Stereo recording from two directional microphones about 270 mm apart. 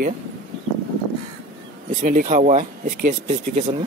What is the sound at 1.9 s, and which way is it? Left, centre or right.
Speech, right.